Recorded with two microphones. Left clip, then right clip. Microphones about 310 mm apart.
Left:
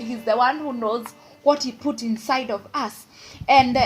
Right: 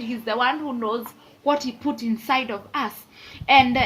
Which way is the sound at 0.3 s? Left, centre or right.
Centre.